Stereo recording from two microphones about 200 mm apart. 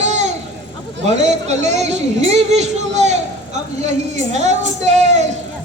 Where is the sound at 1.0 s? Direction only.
35° right (ahead or behind).